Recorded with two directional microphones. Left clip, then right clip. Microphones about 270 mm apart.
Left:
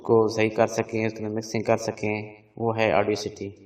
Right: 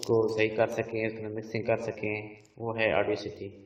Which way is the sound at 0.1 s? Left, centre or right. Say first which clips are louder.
Left 5 dB; left.